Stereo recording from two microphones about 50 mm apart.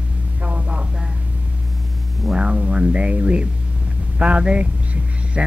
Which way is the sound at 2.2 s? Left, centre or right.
Centre.